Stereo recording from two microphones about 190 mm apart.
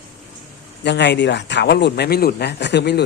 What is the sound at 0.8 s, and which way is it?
Speech, 65° left (ahead or behind).